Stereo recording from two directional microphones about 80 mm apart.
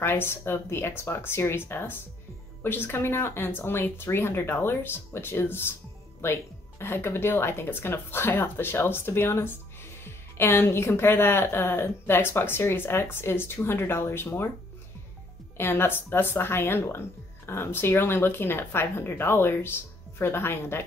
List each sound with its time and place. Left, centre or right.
0.0 s a woman's voice: left
15.5 s speech: left